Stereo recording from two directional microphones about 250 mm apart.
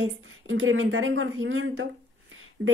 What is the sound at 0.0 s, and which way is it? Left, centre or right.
A woman's voice, right.